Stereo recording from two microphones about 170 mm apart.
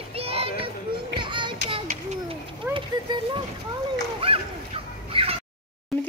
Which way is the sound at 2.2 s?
30° right (ahead or behind).